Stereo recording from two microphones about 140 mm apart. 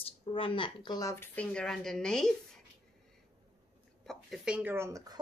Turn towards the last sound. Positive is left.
turn(degrees=-25)  # may be behind; listen again after turning